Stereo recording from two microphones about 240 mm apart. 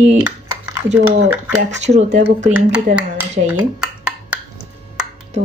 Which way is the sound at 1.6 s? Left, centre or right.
Right.